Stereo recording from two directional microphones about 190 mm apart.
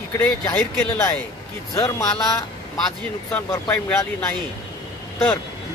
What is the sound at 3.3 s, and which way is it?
Speech, 10° left (ahead or behind).